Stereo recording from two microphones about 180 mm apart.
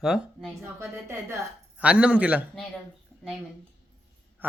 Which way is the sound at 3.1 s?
5° left (ahead or behind).